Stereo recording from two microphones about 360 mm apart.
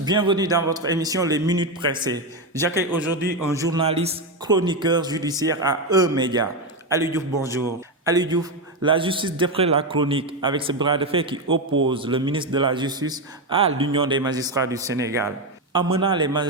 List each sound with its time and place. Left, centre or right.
0.0 s a man's voice: centre
11.4 s a man's voice: right
11.9 s a man's voice: centre